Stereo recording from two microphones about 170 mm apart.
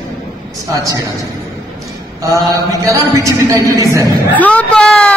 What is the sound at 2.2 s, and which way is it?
A woman's voice, 20° right (ahead or behind).